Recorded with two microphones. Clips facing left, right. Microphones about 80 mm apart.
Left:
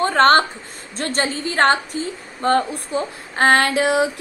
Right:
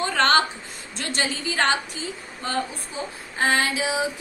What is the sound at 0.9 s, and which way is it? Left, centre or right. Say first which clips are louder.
A woman's voice: left 5 dB; left.